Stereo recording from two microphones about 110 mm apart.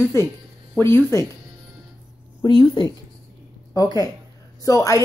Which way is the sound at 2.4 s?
40° left (ahead or behind).